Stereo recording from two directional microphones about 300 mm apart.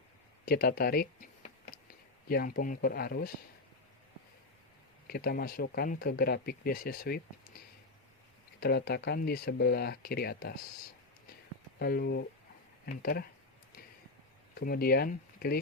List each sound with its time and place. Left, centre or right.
0.4 s tick: left
2.3 s speech: left
5.0 s speech: left
8.6 s speech: left
11.8 s speech: left
14.5 s speech: left